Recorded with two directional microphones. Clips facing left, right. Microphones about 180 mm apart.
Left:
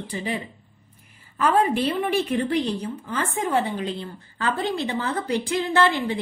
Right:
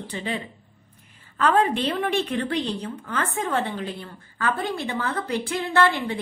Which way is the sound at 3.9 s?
25° left (ahead or behind).